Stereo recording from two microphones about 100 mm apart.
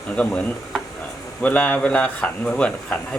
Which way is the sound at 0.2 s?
10° left (ahead or behind).